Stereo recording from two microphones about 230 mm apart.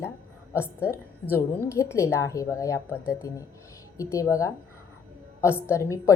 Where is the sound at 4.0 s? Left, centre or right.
Centre.